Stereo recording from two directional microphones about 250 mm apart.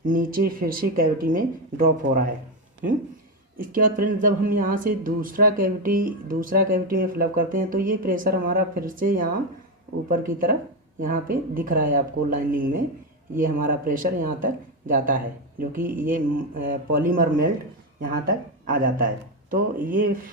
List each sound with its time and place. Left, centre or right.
0.0 s speech: right
3.6 s speech: right